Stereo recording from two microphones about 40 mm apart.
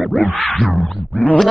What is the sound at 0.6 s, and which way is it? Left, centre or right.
Speech, centre.